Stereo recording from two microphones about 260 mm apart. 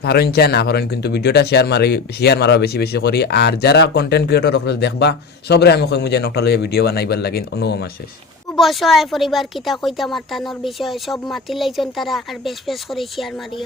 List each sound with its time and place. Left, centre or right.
0.0 s speech: left
8.5 s a woman's voice: centre